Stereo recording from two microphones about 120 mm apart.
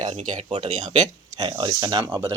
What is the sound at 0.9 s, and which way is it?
Speech, 35° right (ahead or behind).